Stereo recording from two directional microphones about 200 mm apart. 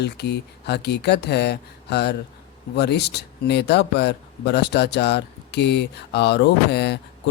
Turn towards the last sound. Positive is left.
turn(degrees=60)  # may be behind; listen again after turning